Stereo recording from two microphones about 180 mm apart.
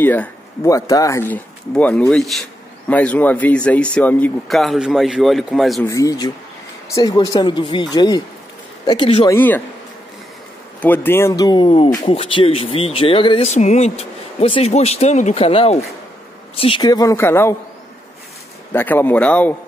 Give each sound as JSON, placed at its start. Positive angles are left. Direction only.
{"t": 0.0, "sound": "speech", "side_deg": 10}
{"t": 5.9, "sound": "speech", "side_deg": 20}
{"t": 9.3, "sound": "speech", "side_deg": 10}
{"t": 10.8, "sound": "speech", "side_deg": 10}
{"t": 18.7, "sound": "speech", "side_deg": 10}